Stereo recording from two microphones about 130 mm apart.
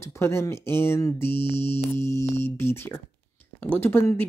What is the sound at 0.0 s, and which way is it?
Speech, 20° left (ahead or behind).